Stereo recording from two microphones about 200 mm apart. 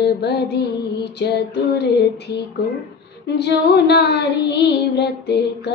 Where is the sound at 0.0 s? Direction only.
55° left (ahead or behind).